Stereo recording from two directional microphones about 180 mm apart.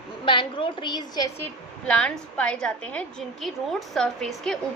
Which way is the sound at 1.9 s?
5° left (ahead or behind).